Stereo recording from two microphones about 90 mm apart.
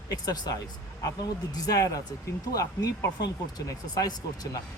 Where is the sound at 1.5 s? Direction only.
45° left (ahead or behind).